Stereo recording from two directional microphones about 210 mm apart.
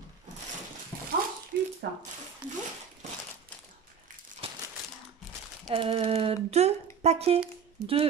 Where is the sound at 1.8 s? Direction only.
45° right (ahead or behind).